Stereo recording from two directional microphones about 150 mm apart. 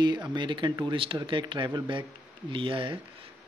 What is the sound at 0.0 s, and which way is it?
Speech, 30° right (ahead or behind).